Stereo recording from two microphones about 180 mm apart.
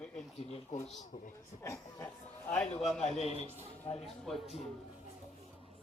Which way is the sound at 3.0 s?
35° left (ahead or behind).